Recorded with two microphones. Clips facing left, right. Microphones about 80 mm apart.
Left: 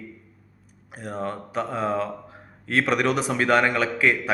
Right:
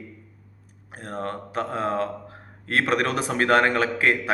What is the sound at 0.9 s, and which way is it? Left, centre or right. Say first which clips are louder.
A man's voice: left 1 dB; right.